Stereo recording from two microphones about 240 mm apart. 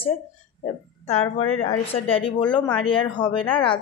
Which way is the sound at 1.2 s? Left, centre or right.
Left.